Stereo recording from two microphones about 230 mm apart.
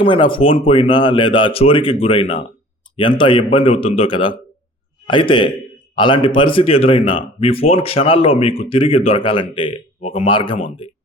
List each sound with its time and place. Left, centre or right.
0.0 s speech: left